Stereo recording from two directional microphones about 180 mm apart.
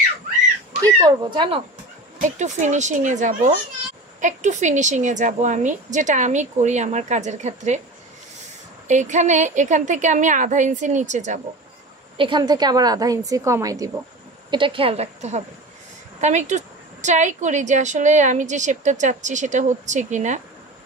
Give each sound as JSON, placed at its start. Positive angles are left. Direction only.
{"t": 0.8, "sound": "a woman's voice", "side_deg": -20}
{"t": 2.2, "sound": "a woman's voice", "side_deg": -40}
{"t": 8.8, "sound": "a woman's voice", "side_deg": -40}
{"t": 12.2, "sound": "a woman's voice", "side_deg": -25}